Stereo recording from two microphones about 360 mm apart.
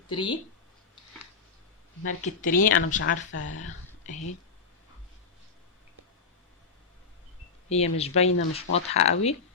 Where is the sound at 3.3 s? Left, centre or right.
Left.